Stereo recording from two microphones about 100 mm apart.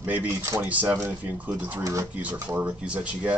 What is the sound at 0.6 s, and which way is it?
Speech, 15° right (ahead or behind).